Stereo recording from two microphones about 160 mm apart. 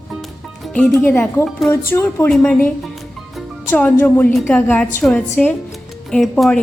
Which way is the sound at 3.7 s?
10° left (ahead or behind).